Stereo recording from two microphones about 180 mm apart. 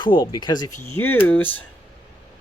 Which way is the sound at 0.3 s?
25° left (ahead or behind).